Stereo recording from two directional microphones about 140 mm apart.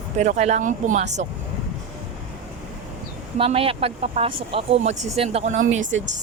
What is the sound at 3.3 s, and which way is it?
Speech, 40° right (ahead or behind).